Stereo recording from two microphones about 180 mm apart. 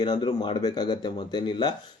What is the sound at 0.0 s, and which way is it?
Speech, 25° left (ahead or behind).